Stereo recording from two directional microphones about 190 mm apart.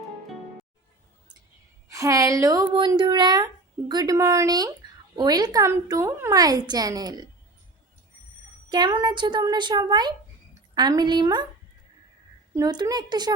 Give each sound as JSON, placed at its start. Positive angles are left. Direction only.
{"t": 1.9, "sound": "speech", "side_deg": -15}
{"t": 8.7, "sound": "speech", "side_deg": -20}
{"t": 12.5, "sound": "speech", "side_deg": -20}